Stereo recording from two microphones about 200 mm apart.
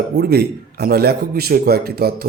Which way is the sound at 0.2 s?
55° right (ahead or behind).